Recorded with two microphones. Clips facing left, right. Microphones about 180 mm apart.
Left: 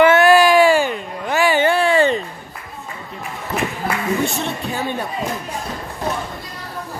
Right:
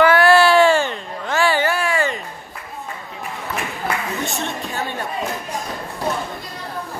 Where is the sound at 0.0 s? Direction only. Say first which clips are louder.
Left 2 dB; 20° left (ahead or behind).